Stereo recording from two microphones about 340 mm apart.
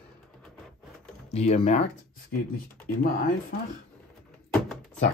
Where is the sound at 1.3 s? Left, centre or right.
Centre.